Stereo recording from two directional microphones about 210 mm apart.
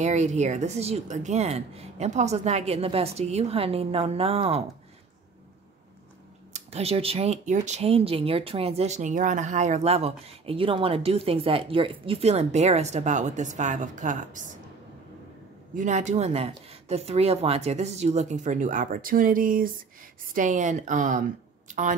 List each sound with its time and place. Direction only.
0.0 s speech: 35° right (ahead or behind)
6.5 s speech: 30° right (ahead or behind)
15.7 s speech: 35° right (ahead or behind)